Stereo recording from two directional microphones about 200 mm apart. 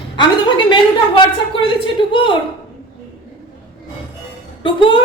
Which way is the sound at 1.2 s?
25° left (ahead or behind).